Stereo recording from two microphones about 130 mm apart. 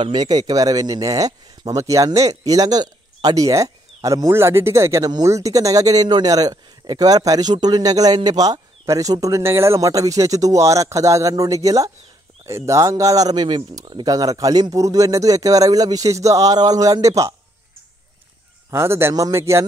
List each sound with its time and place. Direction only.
0.0 s speech: 35° right (ahead or behind)
18.7 s speech: 20° right (ahead or behind)